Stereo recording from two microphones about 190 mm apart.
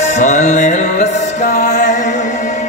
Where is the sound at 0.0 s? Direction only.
40° left (ahead or behind).